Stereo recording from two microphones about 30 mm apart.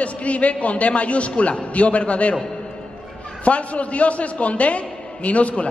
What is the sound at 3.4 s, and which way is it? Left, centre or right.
A man's voice, left.